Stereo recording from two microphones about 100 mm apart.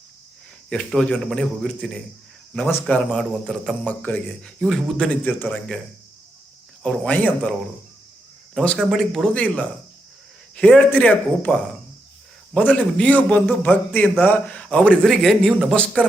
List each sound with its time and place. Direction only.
0.7 s a man's voice: 5° left (ahead or behind)
3.8 s a man's voice: 15° left (ahead or behind)
6.8 s a man's voice: 10° left (ahead or behind)
8.5 s a man's voice: 5° left (ahead or behind)
12.5 s a man's voice: 10° left (ahead or behind)